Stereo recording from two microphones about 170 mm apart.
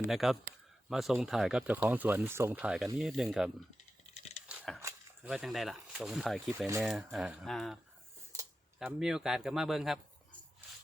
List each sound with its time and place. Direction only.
0.1 s speech: centre (ahead or behind)
4.8 s a sound: 15° right (ahead or behind)
5.3 s speech: centre (ahead or behind)
8.8 s speech: 5° right (ahead or behind)